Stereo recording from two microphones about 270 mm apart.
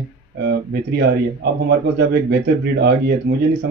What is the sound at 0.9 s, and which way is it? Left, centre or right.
Speech, right.